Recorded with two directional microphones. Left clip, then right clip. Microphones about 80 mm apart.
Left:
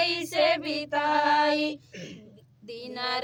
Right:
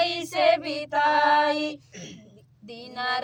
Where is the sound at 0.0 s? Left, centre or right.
Right.